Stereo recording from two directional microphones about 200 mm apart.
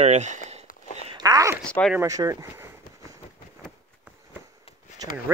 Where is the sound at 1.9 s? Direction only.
15° right (ahead or behind).